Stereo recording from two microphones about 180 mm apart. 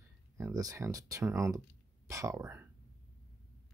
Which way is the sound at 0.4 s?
20° right (ahead or behind).